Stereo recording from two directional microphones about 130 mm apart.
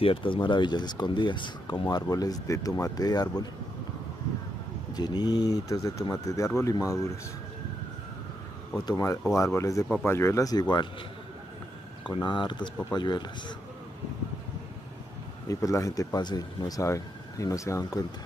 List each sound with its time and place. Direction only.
0.0 s speech: 40° left (ahead or behind)
4.9 s speech: 30° left (ahead or behind)
8.8 s speech: 25° left (ahead or behind)
12.1 s speech: 35° left (ahead or behind)
15.4 s speech: 25° left (ahead or behind)